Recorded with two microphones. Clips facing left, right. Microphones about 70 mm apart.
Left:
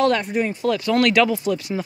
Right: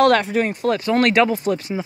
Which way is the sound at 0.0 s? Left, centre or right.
Right.